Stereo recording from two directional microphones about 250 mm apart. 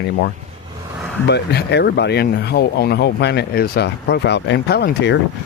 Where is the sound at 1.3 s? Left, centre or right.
Left.